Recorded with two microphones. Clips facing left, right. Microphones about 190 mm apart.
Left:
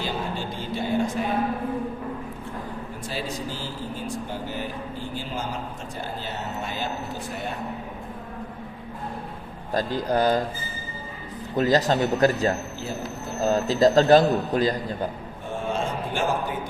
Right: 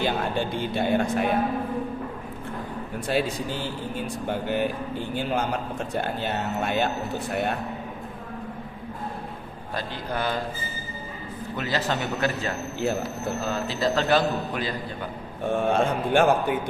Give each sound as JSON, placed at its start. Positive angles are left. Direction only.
{"t": 0.0, "sound": "speech", "side_deg": -60}
{"t": 3.1, "sound": "speech", "side_deg": -60}
{"t": 9.7, "sound": "a man's voice", "side_deg": 40}
{"t": 11.5, "sound": "a man's voice", "side_deg": 40}
{"t": 15.5, "sound": "speech", "side_deg": -60}